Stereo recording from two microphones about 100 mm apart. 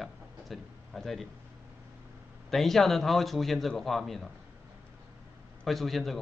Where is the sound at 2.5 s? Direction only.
5° left (ahead or behind).